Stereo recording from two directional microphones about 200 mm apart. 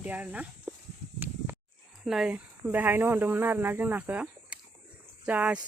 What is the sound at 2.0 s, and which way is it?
Speech, 5° right (ahead or behind).